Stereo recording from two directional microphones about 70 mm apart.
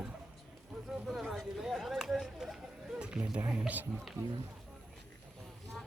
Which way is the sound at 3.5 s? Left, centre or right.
Right.